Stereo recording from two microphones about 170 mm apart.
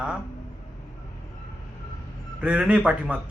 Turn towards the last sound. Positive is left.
turn(degrees=-5)  # may be behind; listen again after turning